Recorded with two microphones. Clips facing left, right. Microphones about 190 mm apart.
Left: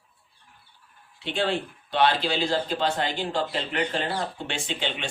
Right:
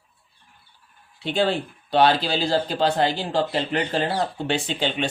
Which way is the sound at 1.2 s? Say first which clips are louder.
Right 4 dB; 35° right (ahead or behind).